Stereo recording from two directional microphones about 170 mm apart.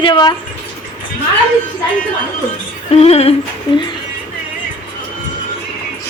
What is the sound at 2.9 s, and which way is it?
Female singing, 40° left (ahead or behind).